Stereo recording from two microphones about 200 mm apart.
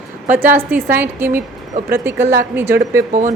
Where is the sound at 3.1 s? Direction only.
40° right (ahead or behind).